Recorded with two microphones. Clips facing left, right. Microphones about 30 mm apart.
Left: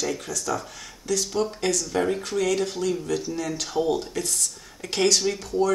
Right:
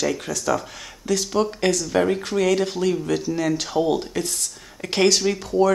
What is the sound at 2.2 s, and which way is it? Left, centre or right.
Speech, right.